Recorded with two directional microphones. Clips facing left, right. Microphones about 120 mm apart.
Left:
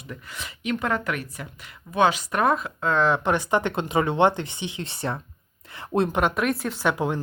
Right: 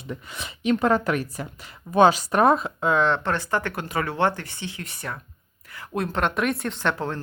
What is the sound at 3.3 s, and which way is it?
Speech, 15° left (ahead or behind).